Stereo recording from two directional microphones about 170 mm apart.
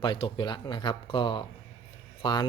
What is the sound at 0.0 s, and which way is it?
A man's voice, 30° left (ahead or behind).